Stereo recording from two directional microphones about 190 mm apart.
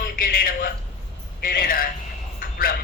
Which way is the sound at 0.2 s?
50° left (ahead or behind).